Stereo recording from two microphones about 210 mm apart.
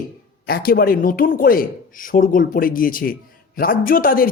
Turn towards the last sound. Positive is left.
turn(degrees=45)  # may be behind; listen again after turning